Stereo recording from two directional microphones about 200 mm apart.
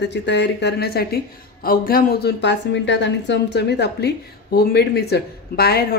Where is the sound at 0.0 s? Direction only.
60° left (ahead or behind).